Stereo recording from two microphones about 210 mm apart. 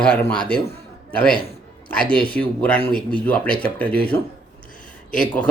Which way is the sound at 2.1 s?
5° left (ahead or behind).